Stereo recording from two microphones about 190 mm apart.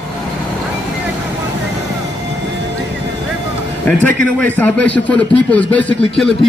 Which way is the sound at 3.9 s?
10° left (ahead or behind).